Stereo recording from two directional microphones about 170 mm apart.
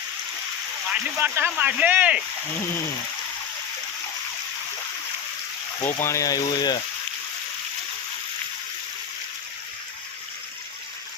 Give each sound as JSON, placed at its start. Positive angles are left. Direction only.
{"t": 0.9, "sound": "speech", "side_deg": -10}
{"t": 5.8, "sound": "speech", "side_deg": 15}